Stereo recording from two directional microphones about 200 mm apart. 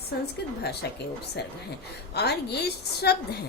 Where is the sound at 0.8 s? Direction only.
55° left (ahead or behind).